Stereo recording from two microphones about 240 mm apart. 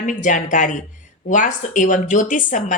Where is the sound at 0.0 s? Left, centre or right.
Left.